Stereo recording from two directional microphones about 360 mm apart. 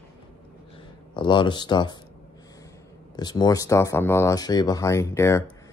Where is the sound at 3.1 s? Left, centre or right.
Centre.